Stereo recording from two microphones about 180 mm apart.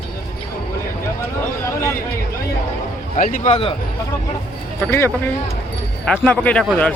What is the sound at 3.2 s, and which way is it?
Speech, 45° left (ahead or behind).